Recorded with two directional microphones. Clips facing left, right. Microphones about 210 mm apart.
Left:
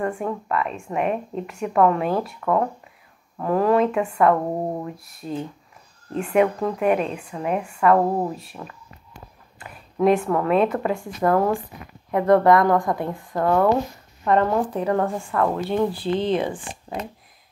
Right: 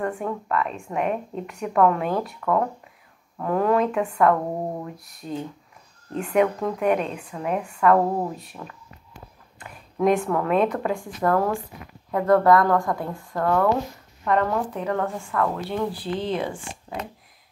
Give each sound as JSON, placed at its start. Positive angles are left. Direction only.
{"t": 0.0, "sound": "a woman's voice", "side_deg": 5}